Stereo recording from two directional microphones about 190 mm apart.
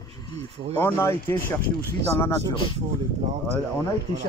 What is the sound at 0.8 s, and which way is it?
Speech, 15° left (ahead or behind).